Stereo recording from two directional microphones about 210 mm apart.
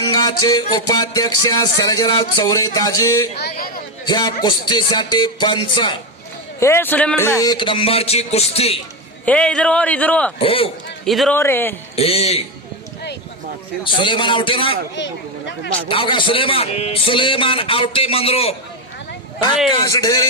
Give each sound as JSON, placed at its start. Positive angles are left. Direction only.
{"t": 0.1, "sound": "music", "side_deg": 15}
{"t": 1.0, "sound": "speech", "side_deg": 15}
{"t": 3.3, "sound": "speech", "side_deg": 50}
{"t": 4.0, "sound": "speech", "side_deg": 20}
{"t": 6.6, "sound": "speech", "side_deg": 10}
{"t": 9.2, "sound": "a man's voice", "side_deg": 5}
{"t": 10.4, "sound": "speech", "side_deg": 25}
{"t": 11.0, "sound": "a man's voice", "side_deg": 0}
{"t": 11.9, "sound": "speech", "side_deg": 30}
{"t": 13.8, "sound": "speech", "side_deg": 25}
{"t": 14.9, "sound": "speech", "side_deg": 60}
{"t": 15.9, "sound": "speech", "side_deg": 25}
{"t": 19.7, "sound": "speech", "side_deg": 15}